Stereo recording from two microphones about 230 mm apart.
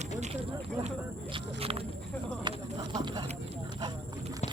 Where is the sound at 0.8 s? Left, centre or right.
Right.